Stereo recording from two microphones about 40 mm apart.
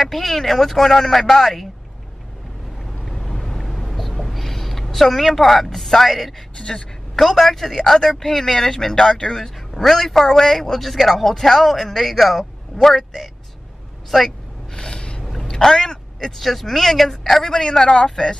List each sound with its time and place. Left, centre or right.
0.0 s speech: centre
3.1 s boat: centre
3.8 s a sound: centre
7.2 s speech: centre
14.7 s a sound: left
15.4 s speech: centre